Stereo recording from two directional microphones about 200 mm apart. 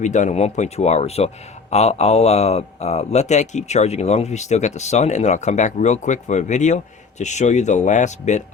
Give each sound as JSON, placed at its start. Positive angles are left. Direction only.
{"t": 0.0, "sound": "speech", "side_deg": 35}